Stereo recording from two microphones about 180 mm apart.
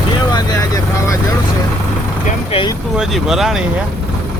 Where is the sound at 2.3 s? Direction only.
30° left (ahead or behind).